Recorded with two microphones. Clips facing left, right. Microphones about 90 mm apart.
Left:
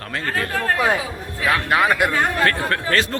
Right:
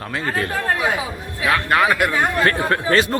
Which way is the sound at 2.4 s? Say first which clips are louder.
Right 2 dB; 20° right (ahead or behind).